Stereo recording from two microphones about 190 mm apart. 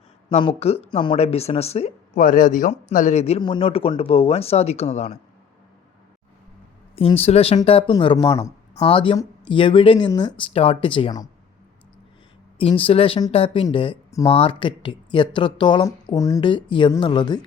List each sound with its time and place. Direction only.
0.3 s speech: 30° left (ahead or behind)
6.9 s speech: 30° left (ahead or behind)
8.7 s speech: 30° left (ahead or behind)
12.5 s speech: 30° left (ahead or behind)